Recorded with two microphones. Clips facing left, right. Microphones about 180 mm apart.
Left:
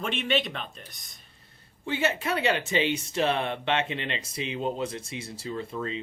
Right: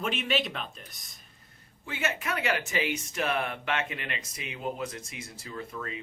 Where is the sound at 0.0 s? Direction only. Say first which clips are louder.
Left 2 dB; 5° right (ahead or behind).